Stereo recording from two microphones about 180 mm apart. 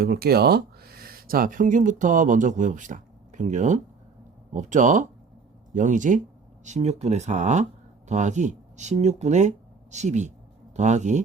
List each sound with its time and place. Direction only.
0.0 s speech: 60° right (ahead or behind); by 11.2 s 40° right (ahead or behind)